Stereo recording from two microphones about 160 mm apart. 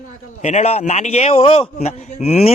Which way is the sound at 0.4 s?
45° left (ahead or behind).